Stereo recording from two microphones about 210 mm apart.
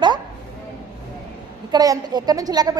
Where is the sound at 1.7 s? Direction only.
20° right (ahead or behind).